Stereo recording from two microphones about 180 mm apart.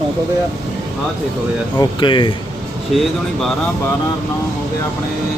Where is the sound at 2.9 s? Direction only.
Centre (ahead or behind).